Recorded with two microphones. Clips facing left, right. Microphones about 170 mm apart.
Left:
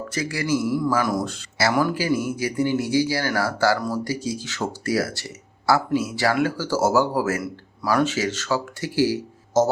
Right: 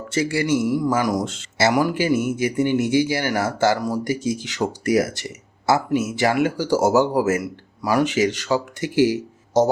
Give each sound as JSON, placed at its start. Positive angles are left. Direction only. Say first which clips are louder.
{"t": 0.1, "sound": "speech", "louder": "right 4 dB", "side_deg": -25}
{"t": 1.7, "sound": "speech", "louder": "even", "side_deg": -15}
{"t": 2.0, "sound": "speech", "louder": "right 3 dB", "side_deg": -25}